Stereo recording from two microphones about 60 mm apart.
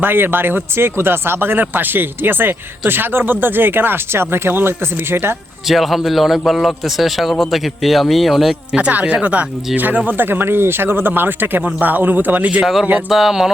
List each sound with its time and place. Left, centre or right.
0.0 s speech: right
5.6 s a man's voice: centre
8.7 s speech: right
12.5 s a man's voice: centre